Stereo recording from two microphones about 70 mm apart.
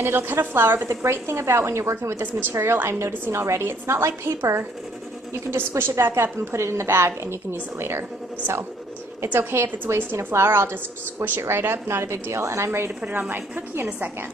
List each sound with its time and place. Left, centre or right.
0.0 s a woman's voice: right
5.7 s a woman's voice: right
9.2 s a woman's voice: right